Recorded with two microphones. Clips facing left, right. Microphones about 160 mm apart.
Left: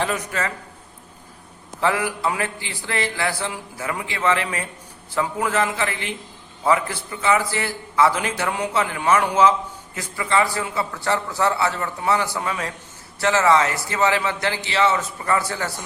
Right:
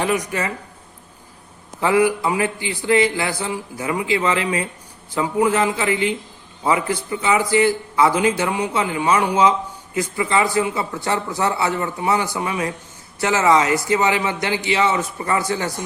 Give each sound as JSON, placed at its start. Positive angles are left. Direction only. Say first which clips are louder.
{"t": 0.1, "sound": "a man's voice", "louder": "right 4 dB", "side_deg": -15}
{"t": 1.8, "sound": "a man's voice", "louder": "right 5 dB", "side_deg": -15}